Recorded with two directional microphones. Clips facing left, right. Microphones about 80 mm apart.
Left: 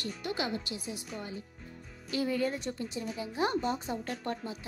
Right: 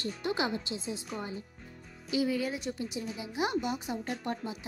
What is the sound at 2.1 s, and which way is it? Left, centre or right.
A woman's voice, centre.